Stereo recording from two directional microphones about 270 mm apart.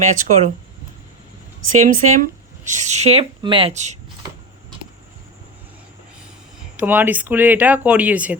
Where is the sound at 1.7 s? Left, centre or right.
Right.